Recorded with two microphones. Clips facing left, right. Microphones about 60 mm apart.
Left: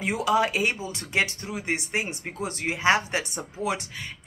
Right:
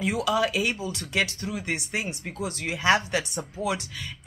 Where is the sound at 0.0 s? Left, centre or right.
Left.